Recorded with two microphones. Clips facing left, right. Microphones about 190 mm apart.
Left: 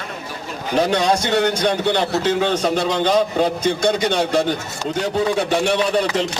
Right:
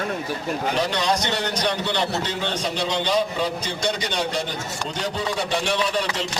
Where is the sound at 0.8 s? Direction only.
50° left (ahead or behind).